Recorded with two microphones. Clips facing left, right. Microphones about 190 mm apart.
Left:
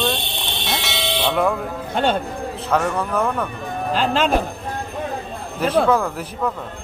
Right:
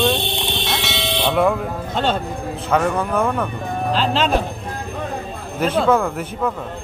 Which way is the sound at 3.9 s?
50° left (ahead or behind).